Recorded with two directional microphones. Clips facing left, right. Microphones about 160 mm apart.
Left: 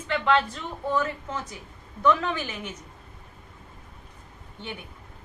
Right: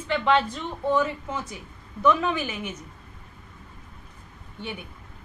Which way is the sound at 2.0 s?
15° right (ahead or behind).